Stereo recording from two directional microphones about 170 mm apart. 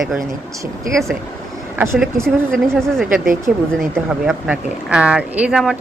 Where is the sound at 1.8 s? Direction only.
10° right (ahead or behind).